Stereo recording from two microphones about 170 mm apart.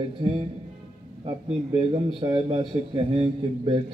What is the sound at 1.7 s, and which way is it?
A man's voice, 30° right (ahead or behind).